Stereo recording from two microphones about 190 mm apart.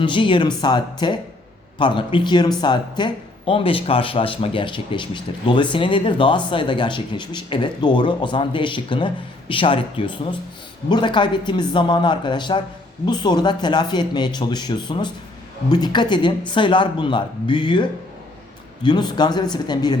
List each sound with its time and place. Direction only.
0.0 s speech: 25° left (ahead or behind)